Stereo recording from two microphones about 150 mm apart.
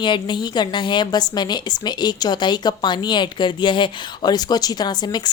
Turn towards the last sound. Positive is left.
turn(degrees=30)  # may be behind; listen again after turning